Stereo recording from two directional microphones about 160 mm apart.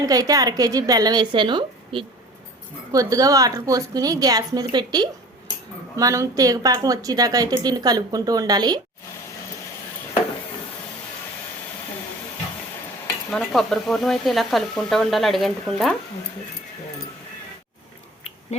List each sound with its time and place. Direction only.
0.0 s a woman's voice: 20° right (ahead or behind)
13.3 s speech: centre (ahead or behind)